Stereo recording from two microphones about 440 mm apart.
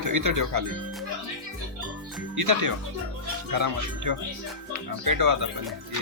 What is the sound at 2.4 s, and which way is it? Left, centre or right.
Speech, right.